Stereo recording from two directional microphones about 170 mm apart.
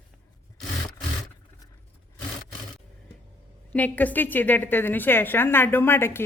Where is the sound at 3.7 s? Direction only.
10° left (ahead or behind).